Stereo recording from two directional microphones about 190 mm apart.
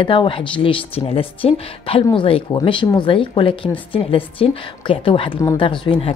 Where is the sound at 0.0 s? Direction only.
25° left (ahead or behind).